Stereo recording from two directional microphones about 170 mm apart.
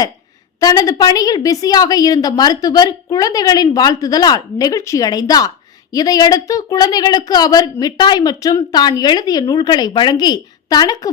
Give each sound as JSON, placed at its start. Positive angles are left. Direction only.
{"t": 0.6, "sound": "a woman's voice", "side_deg": 20}